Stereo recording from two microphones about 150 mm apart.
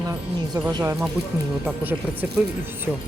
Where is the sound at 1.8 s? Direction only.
10° right (ahead or behind).